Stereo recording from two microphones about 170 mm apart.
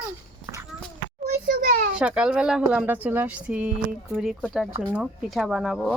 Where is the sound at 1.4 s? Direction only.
60° right (ahead or behind).